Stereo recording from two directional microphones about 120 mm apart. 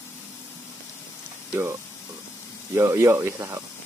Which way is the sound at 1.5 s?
20° right (ahead or behind).